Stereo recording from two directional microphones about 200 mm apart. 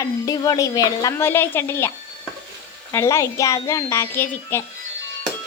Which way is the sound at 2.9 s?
15° left (ahead or behind).